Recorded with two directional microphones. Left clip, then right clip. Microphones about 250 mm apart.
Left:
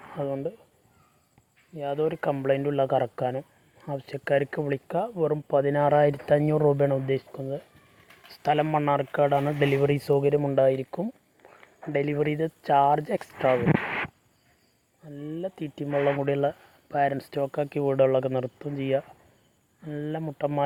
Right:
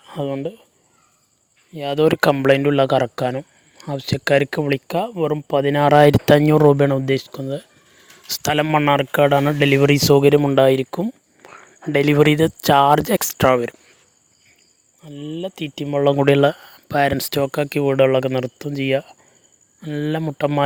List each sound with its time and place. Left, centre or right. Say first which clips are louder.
0.2 s speech: right 6 dB; right
1.7 s speech: right 10 dB; right
15.0 s speech: right 5 dB; right